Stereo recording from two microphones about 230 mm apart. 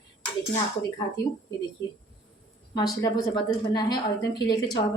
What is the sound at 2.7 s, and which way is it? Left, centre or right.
A woman's voice, centre.